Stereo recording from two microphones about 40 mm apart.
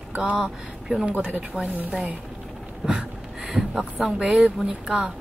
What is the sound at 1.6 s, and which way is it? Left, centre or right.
Speech, right.